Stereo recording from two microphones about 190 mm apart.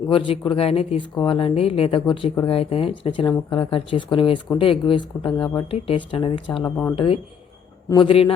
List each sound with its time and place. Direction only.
0.1 s speech: 25° left (ahead or behind)
6.7 s speech: 10° left (ahead or behind)
6.9 s speech: 30° left (ahead or behind)